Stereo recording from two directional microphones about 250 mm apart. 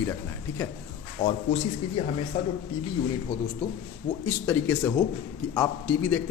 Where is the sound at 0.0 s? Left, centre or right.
Centre.